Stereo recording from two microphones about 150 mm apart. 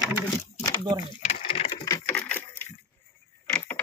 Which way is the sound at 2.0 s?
10° left (ahead or behind).